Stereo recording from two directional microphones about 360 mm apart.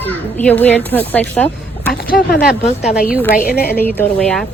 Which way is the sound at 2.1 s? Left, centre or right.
Left.